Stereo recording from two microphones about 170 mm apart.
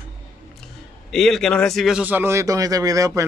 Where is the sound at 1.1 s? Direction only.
Centre (ahead or behind).